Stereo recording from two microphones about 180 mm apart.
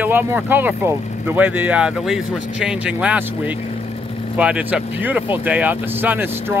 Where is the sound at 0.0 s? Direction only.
10° right (ahead or behind).